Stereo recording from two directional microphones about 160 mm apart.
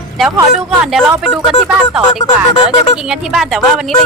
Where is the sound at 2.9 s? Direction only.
5° right (ahead or behind).